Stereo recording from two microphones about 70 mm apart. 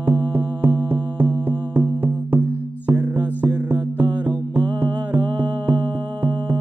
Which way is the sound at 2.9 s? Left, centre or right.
Right.